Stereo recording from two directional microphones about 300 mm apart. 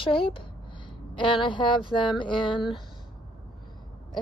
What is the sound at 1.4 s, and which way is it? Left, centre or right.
Speech, centre.